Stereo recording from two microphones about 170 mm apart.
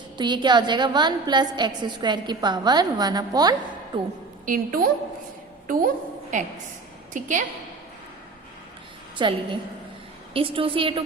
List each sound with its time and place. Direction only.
0.2 s a woman's voice: 25° right (ahead or behind)
4.4 s a woman's voice: 55° right (ahead or behind)
9.1 s a woman's voice: 30° right (ahead or behind)